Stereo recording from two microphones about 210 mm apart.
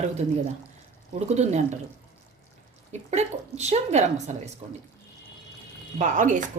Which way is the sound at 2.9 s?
30° right (ahead or behind).